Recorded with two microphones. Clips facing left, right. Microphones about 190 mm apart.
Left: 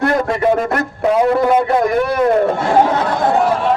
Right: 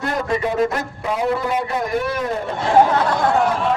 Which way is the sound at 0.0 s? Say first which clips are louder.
Left 6 dB; 65° left (ahead or behind).